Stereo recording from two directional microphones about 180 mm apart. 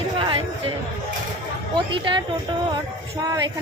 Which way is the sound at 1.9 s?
25° right (ahead or behind).